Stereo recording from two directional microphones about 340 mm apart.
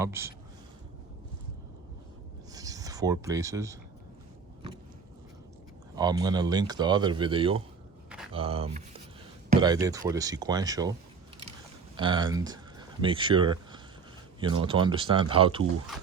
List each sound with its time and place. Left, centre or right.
0.0 s speech: centre
2.5 s rub: centre
6.0 s speech: centre
11.9 s speech: centre